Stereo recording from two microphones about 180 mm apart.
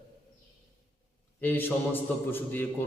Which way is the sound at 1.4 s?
10° left (ahead or behind).